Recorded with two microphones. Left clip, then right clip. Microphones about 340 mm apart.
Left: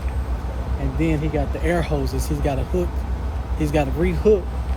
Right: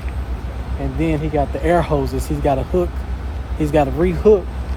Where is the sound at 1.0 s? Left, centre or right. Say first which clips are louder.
Right 4 dB; centre.